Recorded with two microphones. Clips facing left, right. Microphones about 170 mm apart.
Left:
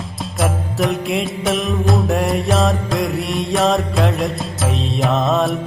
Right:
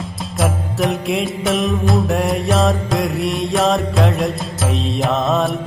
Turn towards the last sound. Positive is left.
turn(degrees=0)  # may be behind; listen again after turning